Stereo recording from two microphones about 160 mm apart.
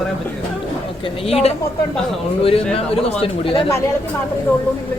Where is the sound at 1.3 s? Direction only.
40° left (ahead or behind).